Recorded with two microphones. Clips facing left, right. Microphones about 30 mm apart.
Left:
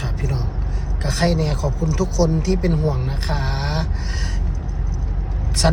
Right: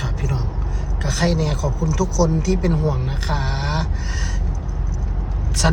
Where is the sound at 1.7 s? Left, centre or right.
Left.